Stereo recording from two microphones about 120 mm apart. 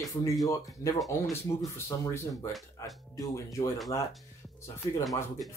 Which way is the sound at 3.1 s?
30° left (ahead or behind).